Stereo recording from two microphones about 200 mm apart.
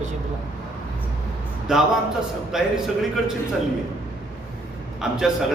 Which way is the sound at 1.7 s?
5° right (ahead or behind).